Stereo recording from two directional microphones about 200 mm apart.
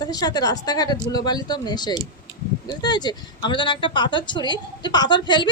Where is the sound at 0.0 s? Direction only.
20° left (ahead or behind).